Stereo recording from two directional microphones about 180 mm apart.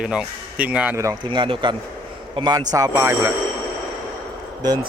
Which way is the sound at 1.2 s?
30° right (ahead or behind).